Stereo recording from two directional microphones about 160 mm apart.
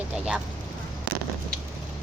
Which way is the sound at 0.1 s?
5° right (ahead or behind).